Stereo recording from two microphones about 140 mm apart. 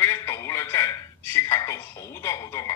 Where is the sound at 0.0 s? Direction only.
20° left (ahead or behind).